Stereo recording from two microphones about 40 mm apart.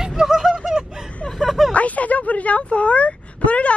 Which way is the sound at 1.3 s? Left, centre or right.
Centre.